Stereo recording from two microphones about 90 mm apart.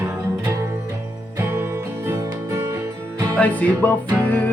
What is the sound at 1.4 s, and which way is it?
Music, 25° right (ahead or behind).